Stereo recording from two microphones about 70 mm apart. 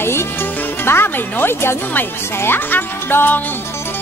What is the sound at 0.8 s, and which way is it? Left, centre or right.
Speech, left.